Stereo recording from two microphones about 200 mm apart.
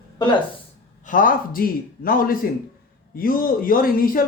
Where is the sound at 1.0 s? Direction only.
40° left (ahead or behind).